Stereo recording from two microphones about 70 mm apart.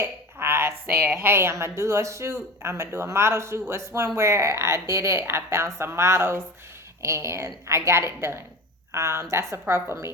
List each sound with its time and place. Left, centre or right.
0.0 s a woman's voice: right